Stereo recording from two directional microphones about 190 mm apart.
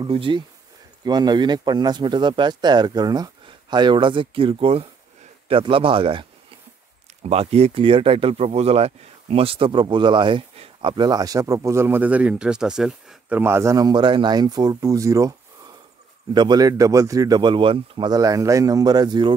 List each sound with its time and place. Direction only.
0.0 s speech: 25° right (ahead or behind)
7.2 s speech: 35° right (ahead or behind)